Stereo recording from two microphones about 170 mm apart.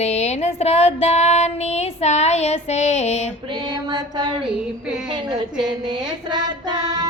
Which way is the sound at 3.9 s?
25° right (ahead or behind).